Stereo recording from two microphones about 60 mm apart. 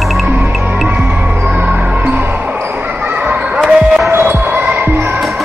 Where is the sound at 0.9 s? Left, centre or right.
Right.